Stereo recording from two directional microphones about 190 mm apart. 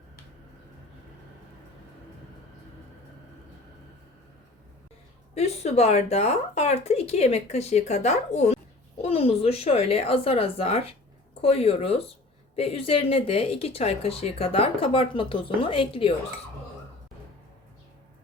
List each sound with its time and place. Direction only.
5.3 s speech: 35° left (ahead or behind)